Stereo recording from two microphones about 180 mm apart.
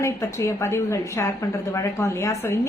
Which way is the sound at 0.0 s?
15° left (ahead or behind).